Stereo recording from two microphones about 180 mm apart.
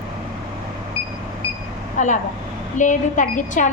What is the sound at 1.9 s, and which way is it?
A woman's voice, 45° left (ahead or behind).